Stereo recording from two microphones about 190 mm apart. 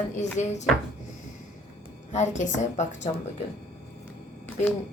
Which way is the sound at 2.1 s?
40° left (ahead or behind).